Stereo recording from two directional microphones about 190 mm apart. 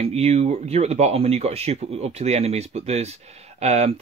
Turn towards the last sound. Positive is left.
turn(degrees=-35)  # may be behind; listen again after turning